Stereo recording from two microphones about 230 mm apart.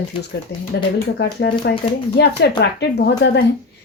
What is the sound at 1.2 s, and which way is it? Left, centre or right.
Speech, left.